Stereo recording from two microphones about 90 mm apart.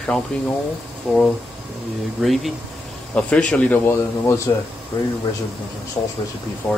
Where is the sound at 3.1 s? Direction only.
10° left (ahead or behind).